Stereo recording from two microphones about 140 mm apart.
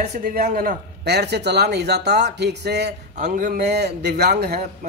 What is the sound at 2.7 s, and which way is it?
Speech, 90° right.